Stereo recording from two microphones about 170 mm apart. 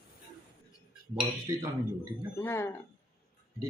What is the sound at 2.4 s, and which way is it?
Dishes, 15° left (ahead or behind).